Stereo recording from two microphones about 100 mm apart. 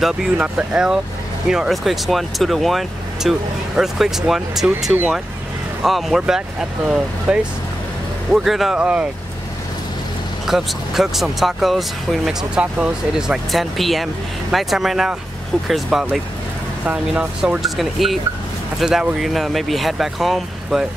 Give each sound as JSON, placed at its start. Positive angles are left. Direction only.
{"t": 0.0, "sound": "speech", "side_deg": -5}
{"t": 10.4, "sound": "speech", "side_deg": -5}